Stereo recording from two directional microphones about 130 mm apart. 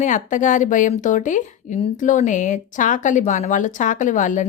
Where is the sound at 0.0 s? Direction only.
75° left (ahead or behind).